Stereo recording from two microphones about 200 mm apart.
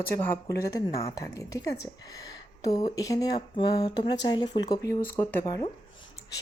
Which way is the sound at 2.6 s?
20° left (ahead or behind).